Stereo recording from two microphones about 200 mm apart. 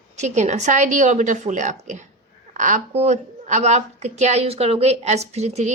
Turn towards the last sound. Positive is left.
turn(degrees=-35)  # may be behind; listen again after turning